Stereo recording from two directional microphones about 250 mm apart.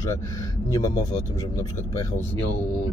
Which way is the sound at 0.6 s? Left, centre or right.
Centre.